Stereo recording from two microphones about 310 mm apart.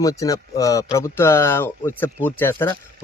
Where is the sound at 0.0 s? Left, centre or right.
Centre.